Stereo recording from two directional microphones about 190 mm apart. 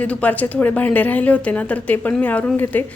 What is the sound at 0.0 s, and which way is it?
A woman's voice, 5° left (ahead or behind).